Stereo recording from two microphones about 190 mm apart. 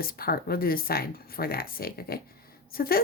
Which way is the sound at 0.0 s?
50° left (ahead or behind).